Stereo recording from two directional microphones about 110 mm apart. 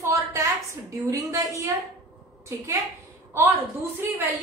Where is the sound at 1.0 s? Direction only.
30° right (ahead or behind).